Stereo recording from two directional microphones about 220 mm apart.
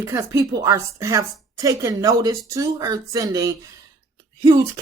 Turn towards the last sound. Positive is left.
turn(degrees=-15)  # may be behind; listen again after turning